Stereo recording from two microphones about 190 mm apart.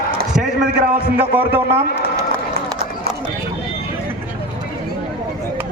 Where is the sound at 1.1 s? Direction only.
10° right (ahead or behind).